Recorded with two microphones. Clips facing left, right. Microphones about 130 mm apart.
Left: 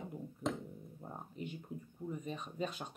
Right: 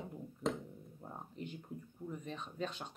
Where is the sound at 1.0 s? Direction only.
5° left (ahead or behind).